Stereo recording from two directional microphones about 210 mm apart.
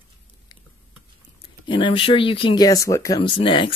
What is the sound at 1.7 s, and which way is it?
Speech, 25° left (ahead or behind).